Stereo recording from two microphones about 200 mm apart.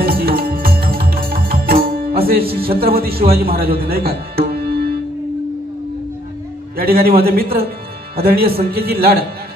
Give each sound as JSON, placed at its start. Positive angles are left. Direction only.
{"t": 0.0, "sound": "music", "side_deg": -50}
{"t": 2.8, "sound": "speech", "side_deg": -50}
{"t": 3.8, "sound": "tabla", "side_deg": -50}
{"t": 6.8, "sound": "speech", "side_deg": -50}